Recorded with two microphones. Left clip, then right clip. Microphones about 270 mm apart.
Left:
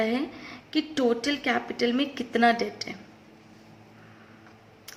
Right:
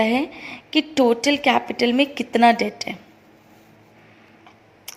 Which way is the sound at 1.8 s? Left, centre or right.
Right.